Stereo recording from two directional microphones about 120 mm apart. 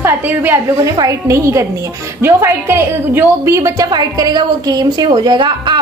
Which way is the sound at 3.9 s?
35° right (ahead or behind).